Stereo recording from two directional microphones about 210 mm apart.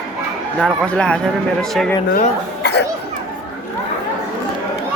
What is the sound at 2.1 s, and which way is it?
Speech, 50° left (ahead or behind).